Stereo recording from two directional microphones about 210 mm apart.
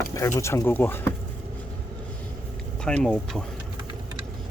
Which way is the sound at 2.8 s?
5° left (ahead or behind).